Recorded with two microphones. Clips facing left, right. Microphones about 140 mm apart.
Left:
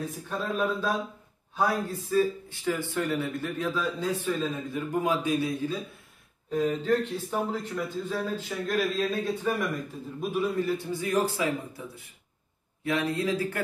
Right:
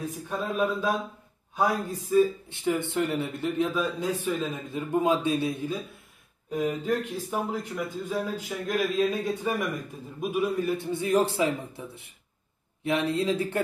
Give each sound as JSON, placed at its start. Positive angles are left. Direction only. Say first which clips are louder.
{"t": 0.4, "sound": "speech", "louder": "right 1 dB", "side_deg": -15}
{"t": 6.5, "sound": "speech", "louder": "left 2 dB", "side_deg": -15}
{"t": 10.9, "sound": "speech", "louder": "right 3 dB", "side_deg": -25}